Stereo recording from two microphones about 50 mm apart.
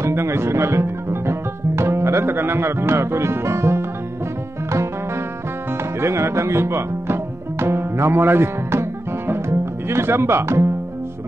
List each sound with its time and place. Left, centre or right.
0.0 s speech: right
5.9 s music: right